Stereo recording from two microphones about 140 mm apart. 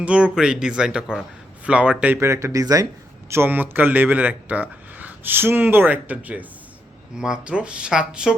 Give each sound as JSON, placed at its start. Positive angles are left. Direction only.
{"t": 0.0, "sound": "speech", "side_deg": -10}